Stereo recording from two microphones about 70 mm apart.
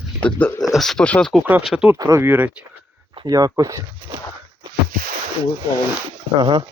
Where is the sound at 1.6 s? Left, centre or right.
Centre.